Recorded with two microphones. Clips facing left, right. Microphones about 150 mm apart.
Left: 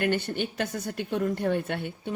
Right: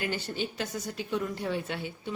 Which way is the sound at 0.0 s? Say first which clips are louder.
Left 6 dB; 60° left (ahead or behind).